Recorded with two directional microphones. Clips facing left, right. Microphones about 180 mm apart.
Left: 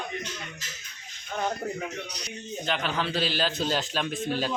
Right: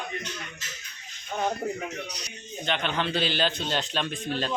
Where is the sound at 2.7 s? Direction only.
5° left (ahead or behind).